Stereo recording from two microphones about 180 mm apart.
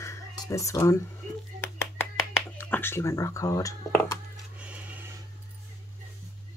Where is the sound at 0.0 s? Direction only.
15° left (ahead or behind).